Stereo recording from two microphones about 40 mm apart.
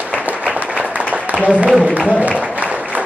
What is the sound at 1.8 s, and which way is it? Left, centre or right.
Music, right.